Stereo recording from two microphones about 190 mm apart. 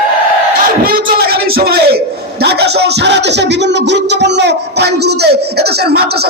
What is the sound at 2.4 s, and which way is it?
Music, 60° right (ahead or behind).